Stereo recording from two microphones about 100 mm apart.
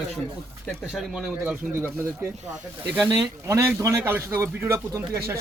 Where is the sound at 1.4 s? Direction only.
20° right (ahead or behind).